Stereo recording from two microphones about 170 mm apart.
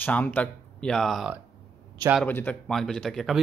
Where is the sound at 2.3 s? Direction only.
10° left (ahead or behind).